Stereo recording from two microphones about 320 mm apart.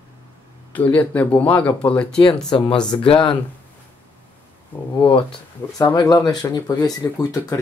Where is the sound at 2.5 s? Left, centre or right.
Centre.